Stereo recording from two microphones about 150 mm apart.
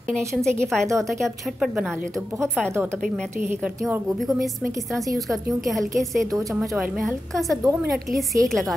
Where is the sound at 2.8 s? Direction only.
Centre (ahead or behind).